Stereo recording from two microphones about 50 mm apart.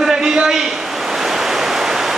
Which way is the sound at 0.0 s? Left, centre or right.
Centre.